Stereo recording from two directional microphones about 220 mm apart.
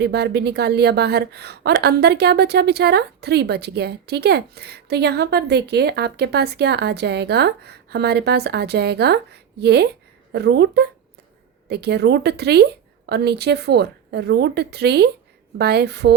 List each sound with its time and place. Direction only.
0.0 s a woman's voice: 50° right (ahead or behind)